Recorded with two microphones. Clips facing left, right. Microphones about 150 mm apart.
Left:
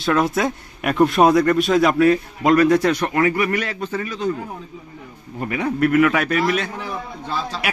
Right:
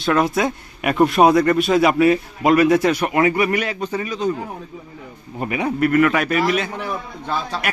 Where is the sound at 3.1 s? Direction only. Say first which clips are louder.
Right 2 dB; 20° right (ahead or behind).